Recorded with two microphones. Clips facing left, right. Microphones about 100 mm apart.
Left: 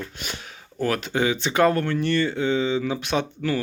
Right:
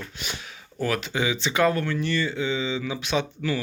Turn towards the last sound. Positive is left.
turn(degrees=50)  # may be behind; listen again after turning